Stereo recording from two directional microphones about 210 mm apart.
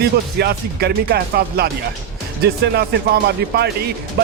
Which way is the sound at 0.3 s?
50° right (ahead or behind).